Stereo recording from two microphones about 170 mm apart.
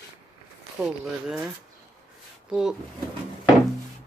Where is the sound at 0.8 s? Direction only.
5° right (ahead or behind).